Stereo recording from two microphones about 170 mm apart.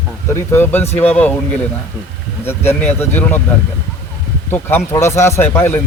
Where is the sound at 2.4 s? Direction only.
15° left (ahead or behind).